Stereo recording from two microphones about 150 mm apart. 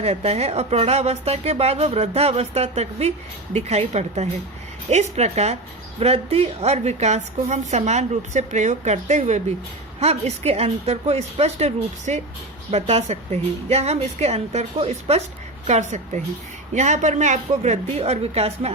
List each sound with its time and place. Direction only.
0.0 s a woman's voice: 45° right (ahead or behind)